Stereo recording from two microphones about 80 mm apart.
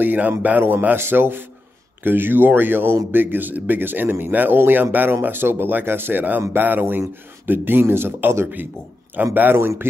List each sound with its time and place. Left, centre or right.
0.0 s speech: right